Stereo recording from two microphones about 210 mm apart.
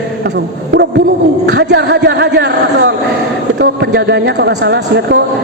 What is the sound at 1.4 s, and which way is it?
Speech, 55° right (ahead or behind).